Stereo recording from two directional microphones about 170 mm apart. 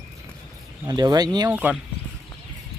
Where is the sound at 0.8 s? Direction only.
25° right (ahead or behind).